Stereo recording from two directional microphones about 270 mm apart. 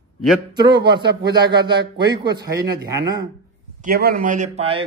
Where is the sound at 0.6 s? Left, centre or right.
Centre.